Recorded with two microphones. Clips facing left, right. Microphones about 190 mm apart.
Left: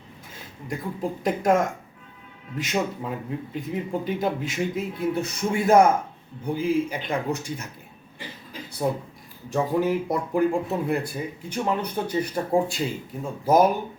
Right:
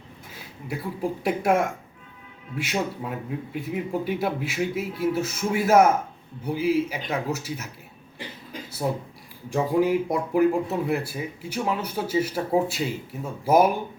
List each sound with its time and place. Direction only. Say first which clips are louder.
0.7 s speech: right 1 dB; 10° right (ahead or behind)
9.5 s speech: right 1 dB; 10° right (ahead or behind)